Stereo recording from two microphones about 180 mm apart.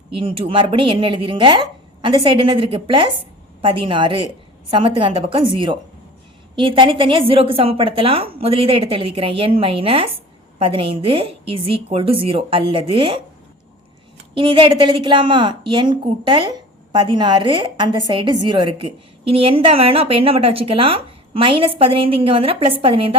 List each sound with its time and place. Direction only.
0.1 s a woman's voice: 30° right (ahead or behind)
14.3 s a woman's voice: 30° right (ahead or behind)